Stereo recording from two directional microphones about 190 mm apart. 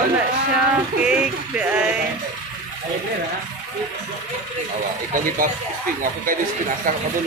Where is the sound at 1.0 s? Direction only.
5° right (ahead or behind).